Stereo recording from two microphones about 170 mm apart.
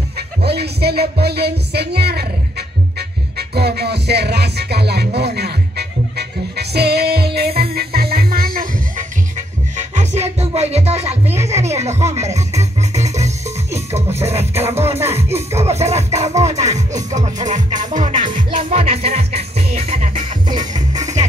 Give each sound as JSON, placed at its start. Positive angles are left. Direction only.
{"t": 0.4, "sound": "speech", "side_deg": -70}
{"t": 3.0, "sound": "music", "side_deg": -70}
{"t": 9.8, "sound": "music", "side_deg": -40}
{"t": 11.2, "sound": "music", "side_deg": -15}
{"t": 11.6, "sound": "music", "side_deg": -40}
{"t": 14.5, "sound": "music", "side_deg": -15}
{"t": 15.6, "sound": "music", "side_deg": -40}
{"t": 16.5, "sound": "speech", "side_deg": -45}
{"t": 17.1, "sound": "music", "side_deg": -45}
{"t": 18.6, "sound": "music", "side_deg": -35}